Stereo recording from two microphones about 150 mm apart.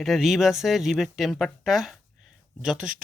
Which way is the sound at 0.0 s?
Centre (ahead or behind).